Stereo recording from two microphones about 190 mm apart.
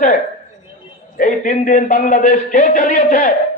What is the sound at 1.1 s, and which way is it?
A man's voice, 45° left (ahead or behind).